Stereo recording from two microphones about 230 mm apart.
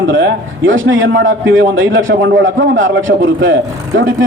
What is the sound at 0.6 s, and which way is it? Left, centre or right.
Speech, right.